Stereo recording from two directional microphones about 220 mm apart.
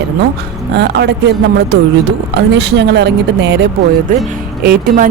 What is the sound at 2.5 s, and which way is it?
Speech, 50° right (ahead or behind).